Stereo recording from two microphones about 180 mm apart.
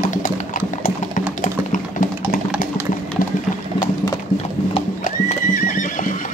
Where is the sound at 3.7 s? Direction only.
20° left (ahead or behind).